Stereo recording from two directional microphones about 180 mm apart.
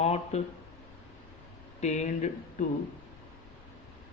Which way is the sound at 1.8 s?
40° left (ahead or behind).